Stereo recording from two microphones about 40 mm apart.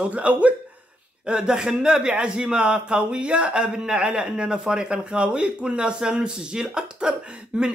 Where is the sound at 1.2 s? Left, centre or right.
Right.